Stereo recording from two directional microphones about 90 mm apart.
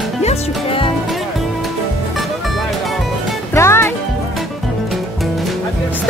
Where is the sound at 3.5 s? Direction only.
30° left (ahead or behind).